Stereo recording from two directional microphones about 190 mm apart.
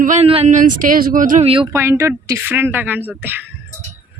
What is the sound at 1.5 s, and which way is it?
Speech, 30° right (ahead or behind).